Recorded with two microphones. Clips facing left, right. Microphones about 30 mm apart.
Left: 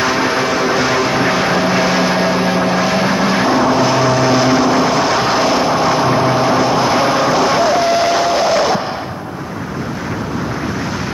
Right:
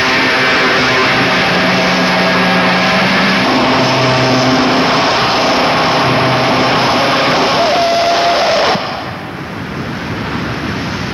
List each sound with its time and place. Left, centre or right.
0.0 s music: right
0.8 s a sound: right
3.8 s vehicle: right